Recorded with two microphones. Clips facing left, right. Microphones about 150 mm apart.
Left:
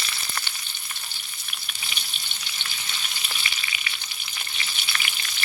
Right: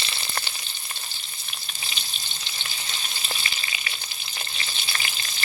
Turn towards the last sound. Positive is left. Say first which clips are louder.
# even
turn(degrees=-35)  # may be behind; listen again after turning